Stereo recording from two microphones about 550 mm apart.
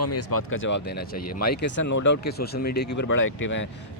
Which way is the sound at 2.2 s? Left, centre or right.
Centre.